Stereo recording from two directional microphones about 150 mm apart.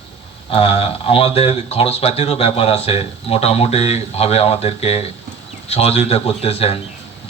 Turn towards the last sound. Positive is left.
turn(degrees=40)  # may be behind; listen again after turning